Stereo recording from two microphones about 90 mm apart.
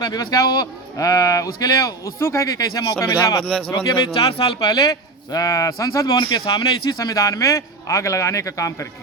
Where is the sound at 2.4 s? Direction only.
45° left (ahead or behind).